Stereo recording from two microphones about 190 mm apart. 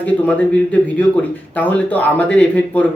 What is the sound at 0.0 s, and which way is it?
Speech, 10° left (ahead or behind).